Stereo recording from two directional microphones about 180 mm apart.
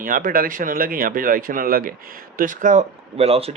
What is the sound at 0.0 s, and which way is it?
Speech, 50° right (ahead or behind).